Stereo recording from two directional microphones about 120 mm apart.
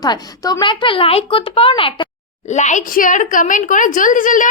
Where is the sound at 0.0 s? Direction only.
30° left (ahead or behind).